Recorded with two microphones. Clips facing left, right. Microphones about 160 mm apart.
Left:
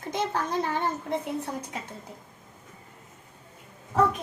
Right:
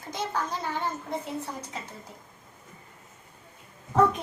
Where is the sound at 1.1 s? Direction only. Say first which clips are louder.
Left 3 dB; 55° left (ahead or behind).